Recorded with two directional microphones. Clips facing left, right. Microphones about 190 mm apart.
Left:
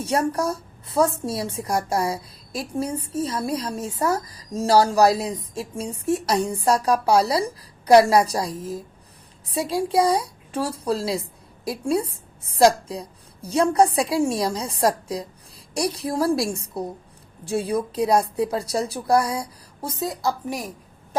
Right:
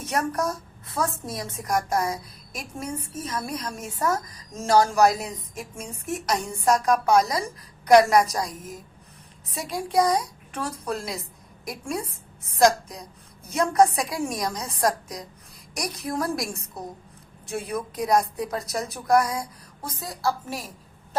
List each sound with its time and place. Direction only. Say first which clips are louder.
0.0 s a woman's voice: left 4 dB; 30° left (ahead or behind)